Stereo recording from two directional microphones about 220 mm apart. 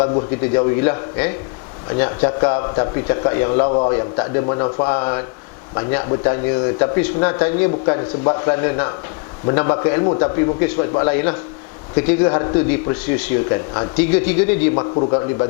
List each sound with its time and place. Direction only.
0.4 s a man's voice: 15° left (ahead or behind)
14.8 s a man's voice: 25° left (ahead or behind)